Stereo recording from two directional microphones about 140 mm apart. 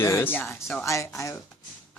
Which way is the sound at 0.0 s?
20° left (ahead or behind).